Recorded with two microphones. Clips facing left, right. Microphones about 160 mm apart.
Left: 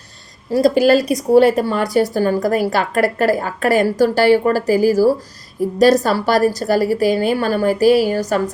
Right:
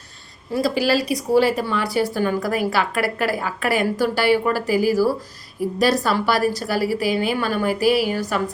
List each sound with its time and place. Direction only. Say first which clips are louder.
0.5 s a woman's voice: left 7 dB; 45° left (ahead or behind)